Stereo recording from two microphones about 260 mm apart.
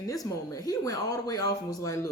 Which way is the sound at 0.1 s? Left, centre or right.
Centre.